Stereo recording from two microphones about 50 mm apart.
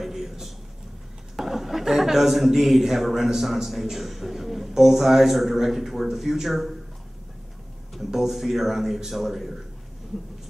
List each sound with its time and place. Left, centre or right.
0.0 s a sound: centre
1.3 s a man's voice: centre
7.9 s speech: centre